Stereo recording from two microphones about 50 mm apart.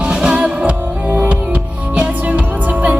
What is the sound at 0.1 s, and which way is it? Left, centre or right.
Music, centre.